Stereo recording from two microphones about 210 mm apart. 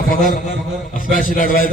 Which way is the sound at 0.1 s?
40° left (ahead or behind).